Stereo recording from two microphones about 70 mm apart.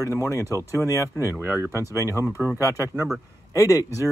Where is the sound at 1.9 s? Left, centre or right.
Left.